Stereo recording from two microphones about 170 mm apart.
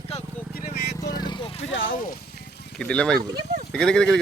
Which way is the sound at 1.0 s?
25° left (ahead or behind).